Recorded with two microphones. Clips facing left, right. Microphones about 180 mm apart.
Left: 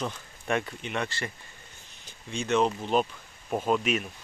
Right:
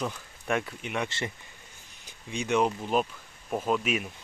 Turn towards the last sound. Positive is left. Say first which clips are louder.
# left 1 dB
turn(degrees=-5)  # may be behind; listen again after turning